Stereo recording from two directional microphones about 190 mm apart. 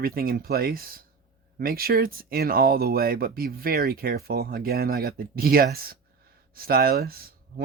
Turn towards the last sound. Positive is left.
turn(degrees=-50)  # may be behind; listen again after turning